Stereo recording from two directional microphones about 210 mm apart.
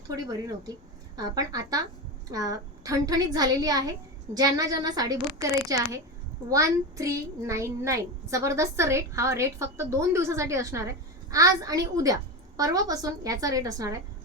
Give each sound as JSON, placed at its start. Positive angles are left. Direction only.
{"t": 0.2, "sound": "a child's voice", "side_deg": -15}